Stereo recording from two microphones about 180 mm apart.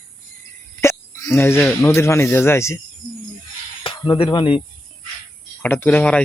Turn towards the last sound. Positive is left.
turn(degrees=5)  # may be behind; listen again after turning